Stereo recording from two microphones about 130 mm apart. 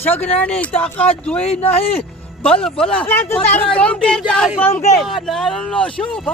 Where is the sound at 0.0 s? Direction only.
15° left (ahead or behind).